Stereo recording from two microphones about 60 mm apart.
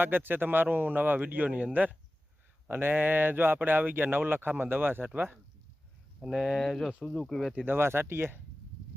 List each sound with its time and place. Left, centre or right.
0.0 s speech: right
2.6 s speech: right
6.1 s speech: centre
7.6 s speech: right